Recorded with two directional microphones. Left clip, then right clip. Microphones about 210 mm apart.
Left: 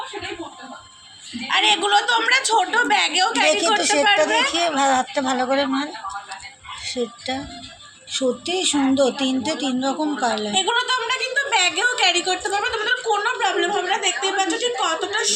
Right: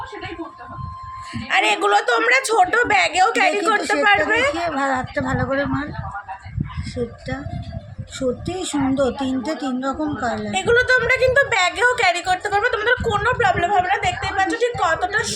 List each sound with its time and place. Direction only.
1.5 s speech: 55° right (ahead or behind)
3.4 s speech: centre (ahead or behind)
8.1 s speech: 5° right (ahead or behind)
10.5 s a woman's voice: 45° right (ahead or behind)